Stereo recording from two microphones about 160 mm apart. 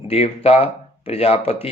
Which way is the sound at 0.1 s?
40° left (ahead or behind).